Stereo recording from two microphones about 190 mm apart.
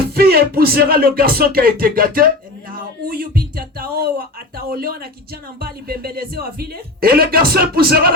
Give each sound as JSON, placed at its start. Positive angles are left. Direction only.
{"t": 0.1, "sound": "speech", "side_deg": -55}